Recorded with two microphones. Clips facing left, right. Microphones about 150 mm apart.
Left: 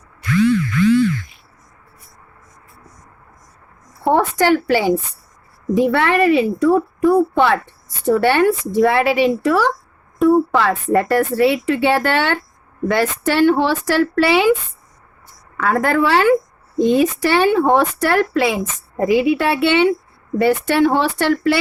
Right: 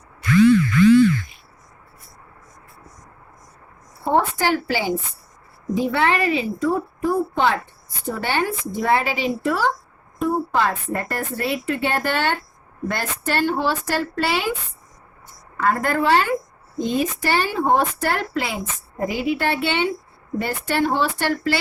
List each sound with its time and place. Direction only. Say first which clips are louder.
4.0 s a woman's voice: left 4 dB; 70° left (ahead or behind); by 14.5 s 85° left
15.6 s speech: left 3 dB; 90° left; by 21.6 s 70° left (ahead or behind)